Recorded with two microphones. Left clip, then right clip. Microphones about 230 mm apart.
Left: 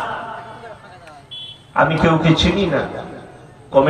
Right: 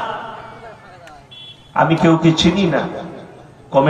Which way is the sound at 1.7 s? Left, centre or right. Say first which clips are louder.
Right 1 dB; right.